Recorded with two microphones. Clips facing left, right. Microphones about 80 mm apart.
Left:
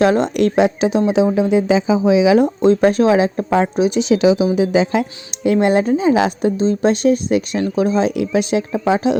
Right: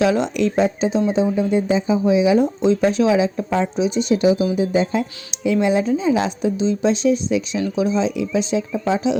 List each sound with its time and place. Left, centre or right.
0.0 s speech: left
2.6 s speech: left